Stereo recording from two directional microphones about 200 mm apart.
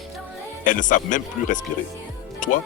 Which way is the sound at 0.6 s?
40° left (ahead or behind).